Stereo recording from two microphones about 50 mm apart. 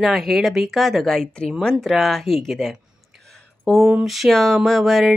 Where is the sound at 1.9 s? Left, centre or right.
Centre.